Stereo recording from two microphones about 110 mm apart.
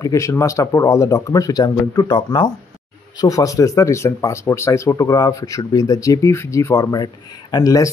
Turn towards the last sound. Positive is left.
turn(degrees=30)  # may be behind; listen again after turning